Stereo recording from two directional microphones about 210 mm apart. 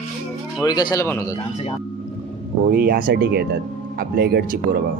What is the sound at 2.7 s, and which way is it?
Speech, 45° right (ahead or behind).